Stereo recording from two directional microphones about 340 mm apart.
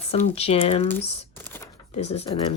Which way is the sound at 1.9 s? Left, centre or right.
Centre.